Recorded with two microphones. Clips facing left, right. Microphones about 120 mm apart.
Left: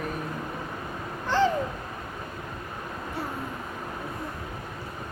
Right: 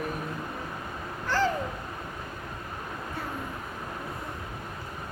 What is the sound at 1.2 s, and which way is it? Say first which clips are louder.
Owl: left 3 dB; 20° left (ahead or behind).